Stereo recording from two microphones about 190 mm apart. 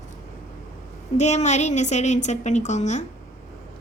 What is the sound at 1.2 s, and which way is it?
A woman's voice, 40° left (ahead or behind).